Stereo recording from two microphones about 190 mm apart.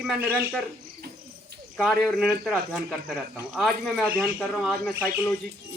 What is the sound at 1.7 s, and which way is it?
Speech, centre (ahead or behind).